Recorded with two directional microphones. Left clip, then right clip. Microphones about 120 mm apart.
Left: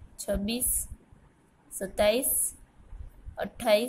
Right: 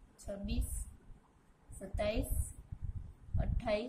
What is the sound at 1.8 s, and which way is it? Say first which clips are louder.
Speech: left 12 dB; 55° left (ahead or behind).